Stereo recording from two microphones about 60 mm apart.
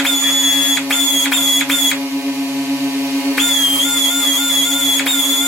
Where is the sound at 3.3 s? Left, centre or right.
Centre.